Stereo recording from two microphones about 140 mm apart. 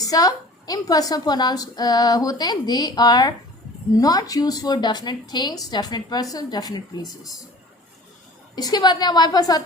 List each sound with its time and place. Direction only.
0.0 s a woman's voice: 25° left (ahead or behind)
8.5 s a woman's voice: 30° left (ahead or behind)